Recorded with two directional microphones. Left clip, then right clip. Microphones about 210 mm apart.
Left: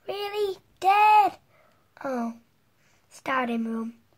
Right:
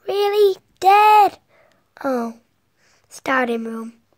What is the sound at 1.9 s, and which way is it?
Speech, 40° right (ahead or behind).